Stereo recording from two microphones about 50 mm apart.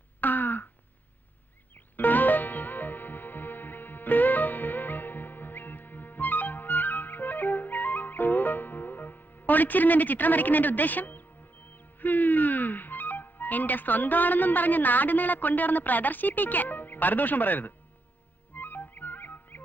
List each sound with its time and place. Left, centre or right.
0.2 s throat clearing: left
2.0 s music: left